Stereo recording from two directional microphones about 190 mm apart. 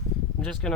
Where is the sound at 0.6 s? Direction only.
5° left (ahead or behind).